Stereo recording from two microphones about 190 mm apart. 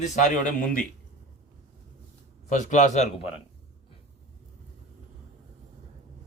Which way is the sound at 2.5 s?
40° left (ahead or behind).